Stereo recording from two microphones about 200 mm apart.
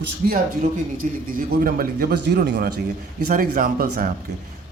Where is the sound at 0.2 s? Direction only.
50° right (ahead or behind).